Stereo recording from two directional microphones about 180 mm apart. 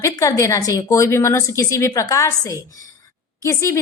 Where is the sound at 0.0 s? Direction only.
20° left (ahead or behind).